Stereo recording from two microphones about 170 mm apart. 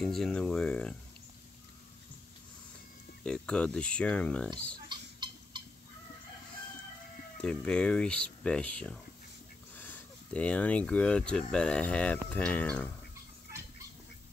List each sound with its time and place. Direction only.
0.0 s speech: 5° left (ahead or behind)
3.3 s speech: 5° left (ahead or behind)
4.7 s a sound: 25° right (ahead or behind)
7.4 s speech: 5° left (ahead or behind)